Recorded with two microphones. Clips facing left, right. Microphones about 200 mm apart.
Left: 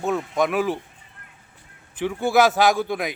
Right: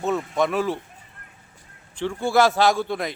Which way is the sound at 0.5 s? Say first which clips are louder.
Left 1 dB; 15° left (ahead or behind).